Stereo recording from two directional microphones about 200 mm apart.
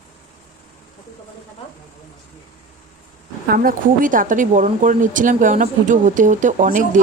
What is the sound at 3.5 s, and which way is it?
A woman's voice, 45° right (ahead or behind).